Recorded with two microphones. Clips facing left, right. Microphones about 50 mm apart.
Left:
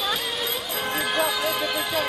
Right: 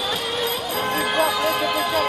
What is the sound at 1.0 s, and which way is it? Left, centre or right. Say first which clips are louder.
Music: right 3 dB; centre.